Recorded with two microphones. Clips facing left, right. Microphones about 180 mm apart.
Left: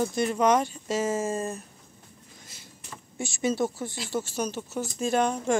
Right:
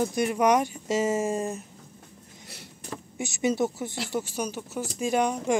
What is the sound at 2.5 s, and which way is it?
Vehicle, 70° right (ahead or behind).